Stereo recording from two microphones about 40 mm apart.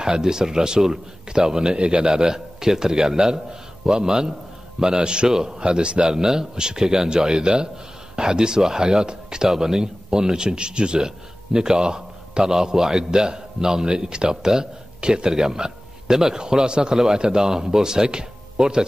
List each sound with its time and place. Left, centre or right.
0.0 s a man's voice: centre